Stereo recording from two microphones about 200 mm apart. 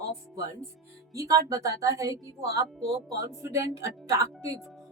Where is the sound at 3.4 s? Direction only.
15° right (ahead or behind).